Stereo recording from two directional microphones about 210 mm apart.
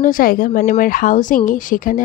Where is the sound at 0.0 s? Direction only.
40° left (ahead or behind).